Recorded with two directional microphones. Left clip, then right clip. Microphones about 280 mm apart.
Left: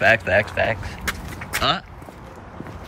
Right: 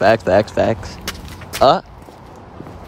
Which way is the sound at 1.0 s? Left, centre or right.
Centre.